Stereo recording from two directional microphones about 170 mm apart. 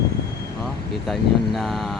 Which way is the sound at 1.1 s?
Centre (ahead or behind).